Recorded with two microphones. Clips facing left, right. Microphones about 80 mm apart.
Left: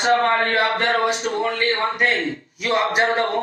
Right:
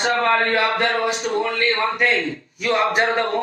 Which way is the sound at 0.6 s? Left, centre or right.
Left.